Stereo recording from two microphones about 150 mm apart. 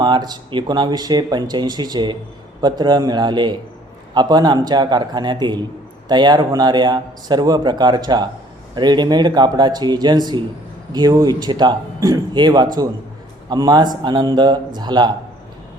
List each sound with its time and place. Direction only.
0.0 s speech: 30° right (ahead or behind)